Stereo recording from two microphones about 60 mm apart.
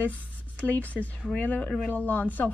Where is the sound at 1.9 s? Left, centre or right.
Left.